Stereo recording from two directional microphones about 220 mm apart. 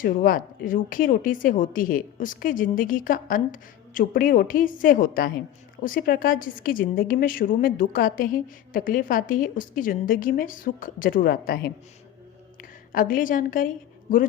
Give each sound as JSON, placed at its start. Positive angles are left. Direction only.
{"t": 0.0, "sound": "a woman's voice", "side_deg": 40}
{"t": 12.9, "sound": "a woman's voice", "side_deg": 40}